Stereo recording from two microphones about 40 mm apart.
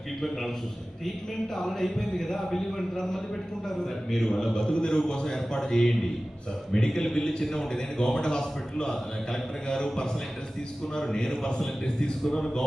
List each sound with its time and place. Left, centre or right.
1.5 s a man's voice: centre
4.7 s a man's voice: left